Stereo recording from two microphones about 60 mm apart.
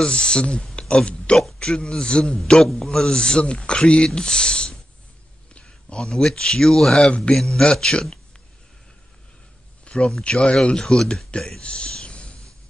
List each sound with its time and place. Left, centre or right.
0.0 s a man's voice: centre
9.8 s a man's voice: centre
11.6 s a sound: centre